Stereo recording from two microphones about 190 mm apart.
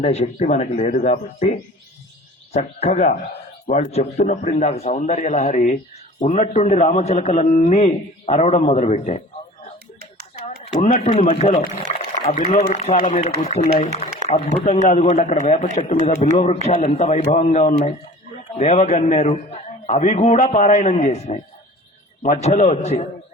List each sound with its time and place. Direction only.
0.0 s a man's voice: 35° left (ahead or behind)
10.4 s a man's voice: 35° left (ahead or behind)